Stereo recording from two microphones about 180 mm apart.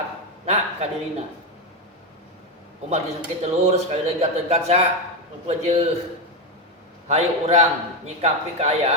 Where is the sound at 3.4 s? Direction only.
35° right (ahead or behind).